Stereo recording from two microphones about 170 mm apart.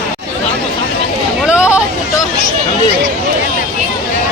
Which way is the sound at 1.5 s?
5° right (ahead or behind).